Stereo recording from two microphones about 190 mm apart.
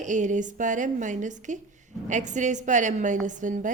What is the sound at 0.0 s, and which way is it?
A woman's voice, 40° right (ahead or behind).